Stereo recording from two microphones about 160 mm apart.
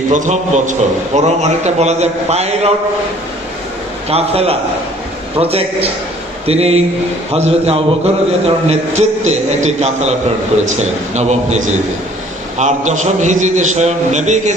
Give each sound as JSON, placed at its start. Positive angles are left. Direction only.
{"t": 0.1, "sound": "a man's voice", "side_deg": -50}
{"t": 4.1, "sound": "a man's voice", "side_deg": -40}